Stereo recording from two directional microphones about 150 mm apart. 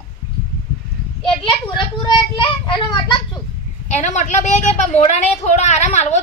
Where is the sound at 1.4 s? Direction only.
30° left (ahead or behind).